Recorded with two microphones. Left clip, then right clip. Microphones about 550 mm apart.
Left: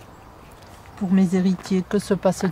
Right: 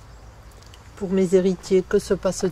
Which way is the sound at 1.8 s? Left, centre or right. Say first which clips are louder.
Even; right.